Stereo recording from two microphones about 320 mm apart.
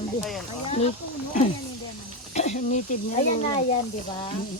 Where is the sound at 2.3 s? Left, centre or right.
Left.